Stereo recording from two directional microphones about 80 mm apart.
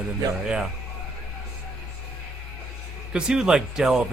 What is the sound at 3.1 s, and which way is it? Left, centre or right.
Speech, centre.